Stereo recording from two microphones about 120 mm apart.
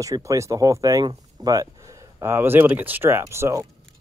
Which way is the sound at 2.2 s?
20° right (ahead or behind).